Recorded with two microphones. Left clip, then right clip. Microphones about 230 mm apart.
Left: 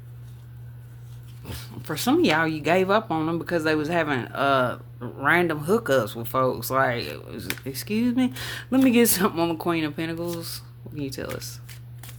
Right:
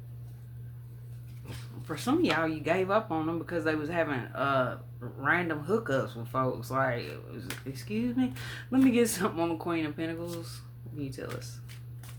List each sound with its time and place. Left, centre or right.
1.5 s speech: left